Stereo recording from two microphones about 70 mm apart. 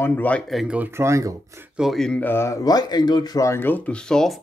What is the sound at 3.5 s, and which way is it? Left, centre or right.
Speech, left.